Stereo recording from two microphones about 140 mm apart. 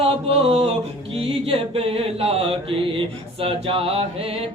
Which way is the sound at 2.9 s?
40° right (ahead or behind).